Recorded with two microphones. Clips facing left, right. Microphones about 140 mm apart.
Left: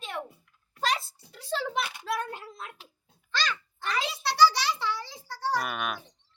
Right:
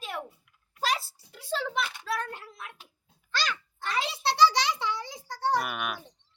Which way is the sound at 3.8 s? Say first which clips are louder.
Right 1 dB; 25° right (ahead or behind).